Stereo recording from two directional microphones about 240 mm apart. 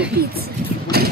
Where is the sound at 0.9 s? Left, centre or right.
Right.